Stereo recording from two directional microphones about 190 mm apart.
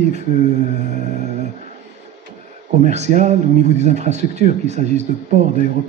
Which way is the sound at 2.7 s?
35° right (ahead or behind).